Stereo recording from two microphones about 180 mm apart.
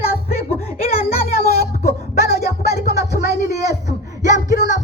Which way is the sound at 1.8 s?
60° left (ahead or behind).